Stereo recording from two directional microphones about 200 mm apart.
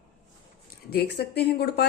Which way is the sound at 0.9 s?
55° left (ahead or behind).